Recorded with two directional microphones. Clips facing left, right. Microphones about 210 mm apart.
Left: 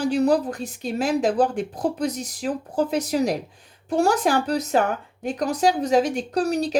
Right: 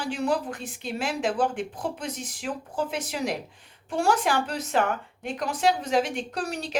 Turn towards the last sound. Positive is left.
turn(degrees=40)  # may be behind; listen again after turning